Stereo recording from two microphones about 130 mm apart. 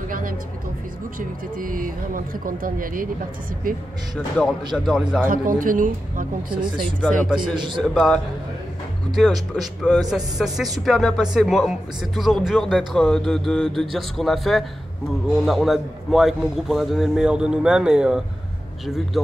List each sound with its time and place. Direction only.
0.1 s a sound: 90° right
1.6 s speech: 90° right
4.7 s speech: 5° right (ahead or behind)
5.3 s speech: 90° right
7.2 s a man's voice: 5° right (ahead or behind)
7.5 s a man's voice: 35° right (ahead or behind)
7.8 s speech: centre (ahead or behind)
19.2 s speech: 20° left (ahead or behind)